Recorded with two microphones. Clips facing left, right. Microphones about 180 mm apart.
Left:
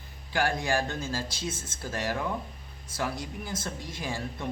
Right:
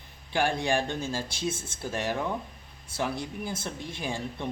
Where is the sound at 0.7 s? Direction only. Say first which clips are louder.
Right 1 dB; 15° right (ahead or behind).